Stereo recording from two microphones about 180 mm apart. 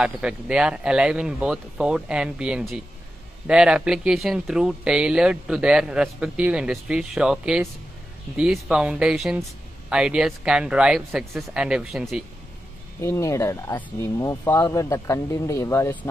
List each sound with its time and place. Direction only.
0.0 s speech: 5° right (ahead or behind)
13.0 s speech: 15° left (ahead or behind)